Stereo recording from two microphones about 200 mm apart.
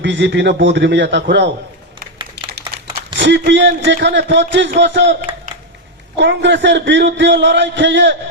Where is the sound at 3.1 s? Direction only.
65° right (ahead or behind).